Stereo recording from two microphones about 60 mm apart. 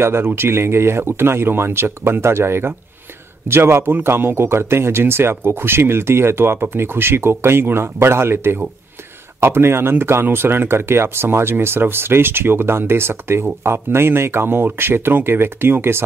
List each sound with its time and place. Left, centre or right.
0.0 s speech: right